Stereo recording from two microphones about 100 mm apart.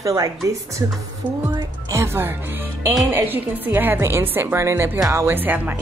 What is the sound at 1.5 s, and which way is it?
Music, 30° right (ahead or behind).